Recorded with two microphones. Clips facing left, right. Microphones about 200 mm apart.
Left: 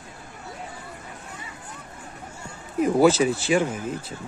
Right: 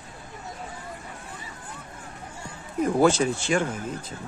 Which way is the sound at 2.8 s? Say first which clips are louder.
Left 3 dB; 5° left (ahead or behind).